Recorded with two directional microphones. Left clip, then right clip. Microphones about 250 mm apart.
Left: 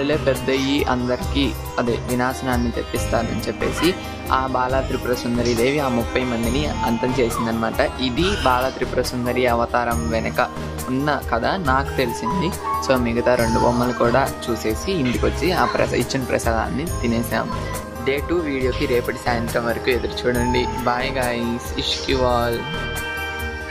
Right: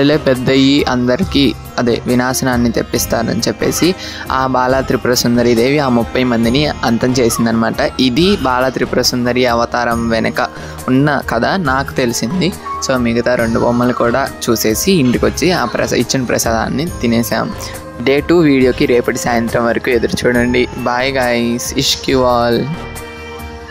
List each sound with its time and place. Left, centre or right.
0.0 s speech: right